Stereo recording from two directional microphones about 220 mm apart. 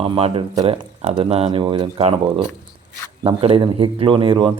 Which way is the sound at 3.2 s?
25° right (ahead or behind).